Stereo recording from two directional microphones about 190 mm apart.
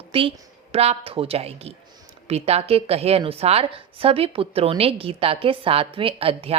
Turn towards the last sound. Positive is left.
turn(degrees=-30)  # may be behind; listen again after turning